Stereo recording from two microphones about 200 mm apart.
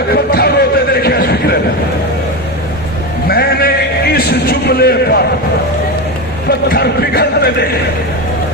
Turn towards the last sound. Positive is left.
turn(degrees=55)  # may be behind; listen again after turning